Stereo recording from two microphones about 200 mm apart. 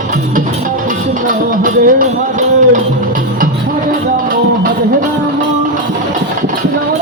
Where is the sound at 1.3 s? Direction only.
45° right (ahead or behind).